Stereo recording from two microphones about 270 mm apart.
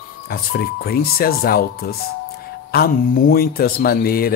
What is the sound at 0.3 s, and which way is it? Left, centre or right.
Speech, left.